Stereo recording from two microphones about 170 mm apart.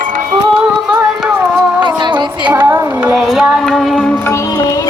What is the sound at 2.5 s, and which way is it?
Music, 15° right (ahead or behind).